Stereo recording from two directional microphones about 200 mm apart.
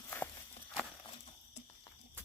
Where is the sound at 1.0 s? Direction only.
25° left (ahead or behind).